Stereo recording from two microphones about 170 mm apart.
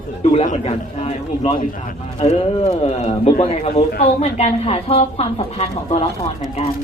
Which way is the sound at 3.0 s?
35° left (ahead or behind).